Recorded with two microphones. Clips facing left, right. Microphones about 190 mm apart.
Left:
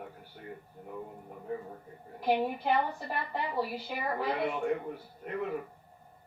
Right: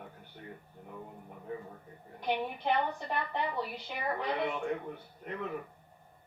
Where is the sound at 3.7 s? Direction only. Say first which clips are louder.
Left 2 dB; 5° left (ahead or behind).